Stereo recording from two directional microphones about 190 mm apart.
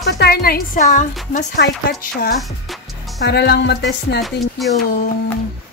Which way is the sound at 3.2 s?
60° left (ahead or behind).